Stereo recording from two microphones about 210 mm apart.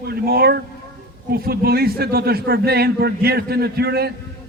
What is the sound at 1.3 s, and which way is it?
A man's voice, 45° right (ahead or behind).